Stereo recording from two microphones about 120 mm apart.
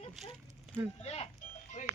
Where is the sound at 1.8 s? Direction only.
70° left (ahead or behind).